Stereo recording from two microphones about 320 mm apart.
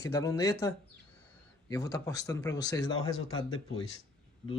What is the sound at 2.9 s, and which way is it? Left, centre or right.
Speech, left.